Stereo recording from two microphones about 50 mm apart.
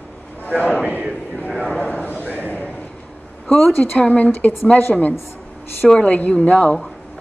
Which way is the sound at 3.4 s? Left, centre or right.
Left.